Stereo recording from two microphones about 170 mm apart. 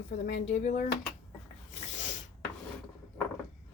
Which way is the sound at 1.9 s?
45° left (ahead or behind).